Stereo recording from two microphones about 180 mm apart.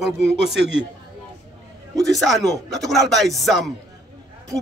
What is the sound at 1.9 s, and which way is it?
Speech, centre (ahead or behind).